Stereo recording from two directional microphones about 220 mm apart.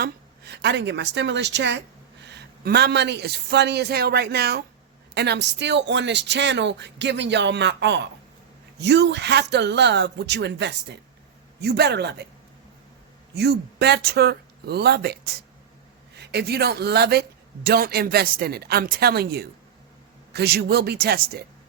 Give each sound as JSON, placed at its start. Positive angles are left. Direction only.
{"t": 0.0, "sound": "a woman's voice", "side_deg": -50}
{"t": 13.3, "sound": "speech", "side_deg": -50}